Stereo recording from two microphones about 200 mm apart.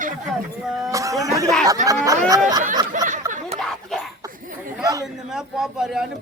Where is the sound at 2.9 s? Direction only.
40° right (ahead or behind).